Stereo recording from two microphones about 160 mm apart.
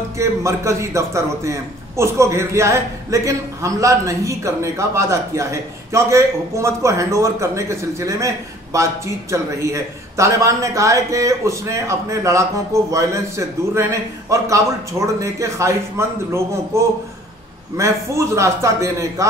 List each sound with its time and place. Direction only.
0.2 s a man's voice: 20° right (ahead or behind)
14.3 s a man's voice: 20° right (ahead or behind)